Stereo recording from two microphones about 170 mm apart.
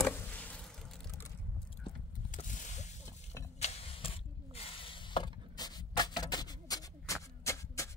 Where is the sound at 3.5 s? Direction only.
35° left (ahead or behind); by 7.9 s 15° left (ahead or behind).